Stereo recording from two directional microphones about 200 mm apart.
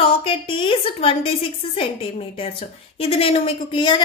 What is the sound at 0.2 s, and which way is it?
A woman's voice, 25° left (ahead or behind).